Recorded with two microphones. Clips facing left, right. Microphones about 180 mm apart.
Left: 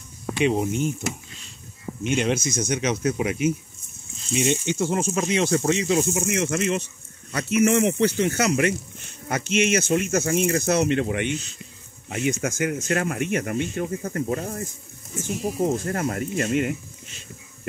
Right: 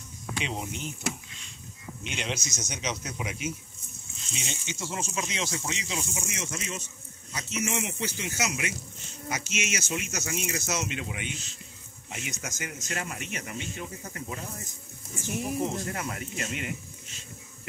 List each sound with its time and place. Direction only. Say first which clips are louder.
0.4 s speech: left 13 dB; 55° left (ahead or behind)